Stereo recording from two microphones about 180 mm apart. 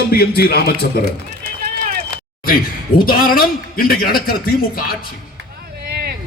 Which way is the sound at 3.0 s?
55° left (ahead or behind).